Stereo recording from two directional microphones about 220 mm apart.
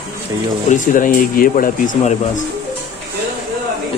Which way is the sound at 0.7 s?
35° left (ahead or behind).